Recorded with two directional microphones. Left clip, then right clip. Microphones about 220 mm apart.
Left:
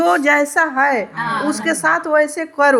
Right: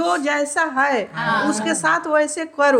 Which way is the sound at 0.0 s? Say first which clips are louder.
Left 6 dB; 30° left (ahead or behind).